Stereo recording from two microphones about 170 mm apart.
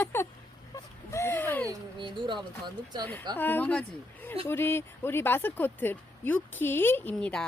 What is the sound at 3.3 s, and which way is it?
Speech, 10° left (ahead or behind).